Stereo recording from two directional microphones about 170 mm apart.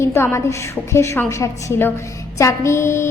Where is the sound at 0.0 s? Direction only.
15° left (ahead or behind).